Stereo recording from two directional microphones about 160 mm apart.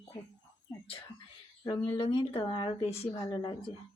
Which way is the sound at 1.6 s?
25° left (ahead or behind).